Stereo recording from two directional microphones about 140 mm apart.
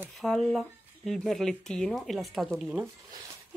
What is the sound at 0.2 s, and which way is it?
Speech, centre (ahead or behind).